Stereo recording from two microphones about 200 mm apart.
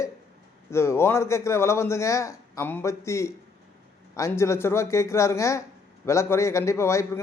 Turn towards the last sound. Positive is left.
turn(degrees=15)  # may be behind; listen again after turning